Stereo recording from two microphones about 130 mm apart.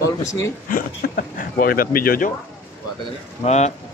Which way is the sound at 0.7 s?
90° left.